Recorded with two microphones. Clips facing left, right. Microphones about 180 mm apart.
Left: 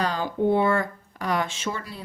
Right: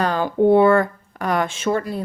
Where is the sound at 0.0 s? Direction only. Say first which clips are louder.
Right 6 dB; 55° right (ahead or behind).